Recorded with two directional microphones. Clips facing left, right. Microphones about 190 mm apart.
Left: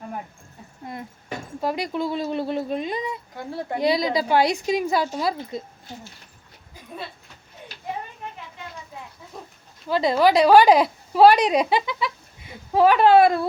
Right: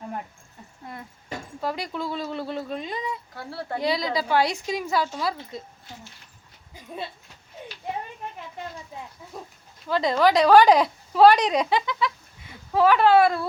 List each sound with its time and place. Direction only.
1.6 s speech: 15° left (ahead or behind)
9.9 s speech: 10° left (ahead or behind)